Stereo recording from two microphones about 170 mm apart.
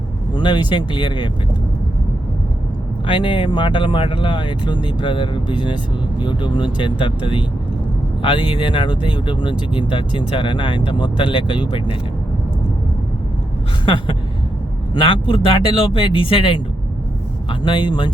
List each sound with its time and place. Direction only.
0.3 s speech: 25° left (ahead or behind)
3.1 s speech: 30° left (ahead or behind)
13.8 s speech: 30° left (ahead or behind)